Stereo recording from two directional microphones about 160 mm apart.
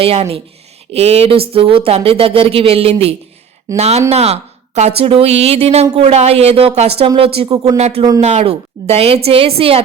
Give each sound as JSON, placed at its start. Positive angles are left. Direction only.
{"t": 0.0, "sound": "a woman's voice", "side_deg": -35}